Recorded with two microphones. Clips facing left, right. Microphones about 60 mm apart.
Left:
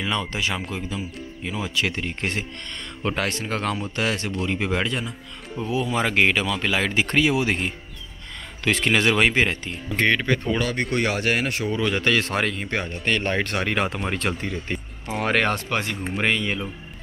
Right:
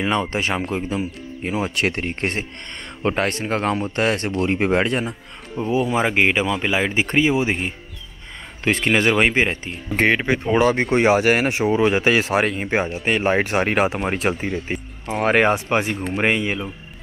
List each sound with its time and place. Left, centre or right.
0.0 s speech: right
1.8 s speech: right
3.0 s speech: right
5.6 s speech: centre
8.6 s speech: right; by 15.3 s centre
15.3 s speech: centre